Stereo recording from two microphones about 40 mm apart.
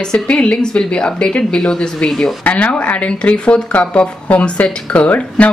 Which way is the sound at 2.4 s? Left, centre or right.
Left.